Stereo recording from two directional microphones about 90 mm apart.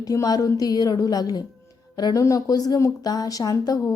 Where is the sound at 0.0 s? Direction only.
40° left (ahead or behind).